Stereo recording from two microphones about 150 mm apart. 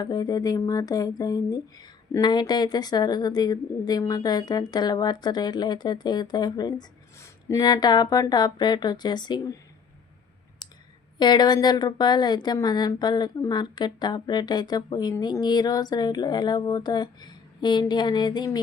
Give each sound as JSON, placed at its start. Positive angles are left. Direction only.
{"t": 0.0, "sound": "speech", "side_deg": 25}
{"t": 11.2, "sound": "speech", "side_deg": 30}